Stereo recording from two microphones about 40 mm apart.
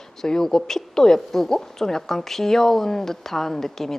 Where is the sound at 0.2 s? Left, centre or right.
Centre.